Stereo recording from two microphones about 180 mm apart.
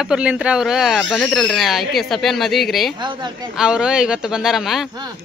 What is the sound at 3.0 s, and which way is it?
Speech, 25° right (ahead or behind).